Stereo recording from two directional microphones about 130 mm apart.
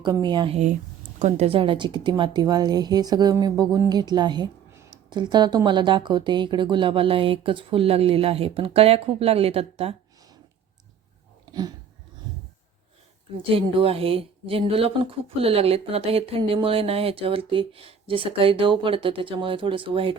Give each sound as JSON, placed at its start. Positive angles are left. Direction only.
{"t": 0.0, "sound": "a woman's voice", "side_deg": -35}
{"t": 1.2, "sound": "a woman's voice", "side_deg": -50}
{"t": 13.3, "sound": "speech", "side_deg": -45}